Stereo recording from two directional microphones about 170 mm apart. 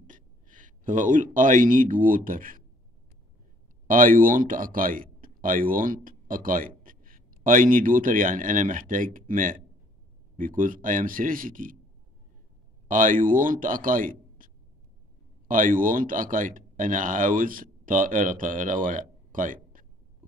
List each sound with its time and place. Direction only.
0.0 s speech: 50° right (ahead or behind)
3.8 s a man's voice: 55° right (ahead or behind)
12.8 s speech: 50° right (ahead or behind)